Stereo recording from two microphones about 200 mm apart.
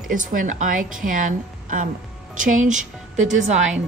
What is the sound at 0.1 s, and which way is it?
A woman's voice, 40° right (ahead or behind).